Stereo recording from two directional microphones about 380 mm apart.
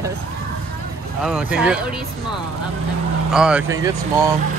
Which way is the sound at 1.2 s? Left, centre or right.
Centre.